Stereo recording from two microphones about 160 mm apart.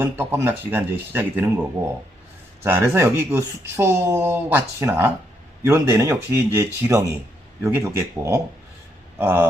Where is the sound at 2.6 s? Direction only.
15° right (ahead or behind).